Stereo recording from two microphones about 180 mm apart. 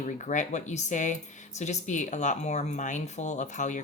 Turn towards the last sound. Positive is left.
turn(degrees=40)  # may be behind; listen again after turning